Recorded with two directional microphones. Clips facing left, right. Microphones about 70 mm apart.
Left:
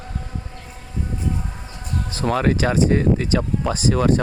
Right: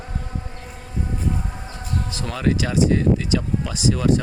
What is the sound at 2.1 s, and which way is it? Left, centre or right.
Speech, left.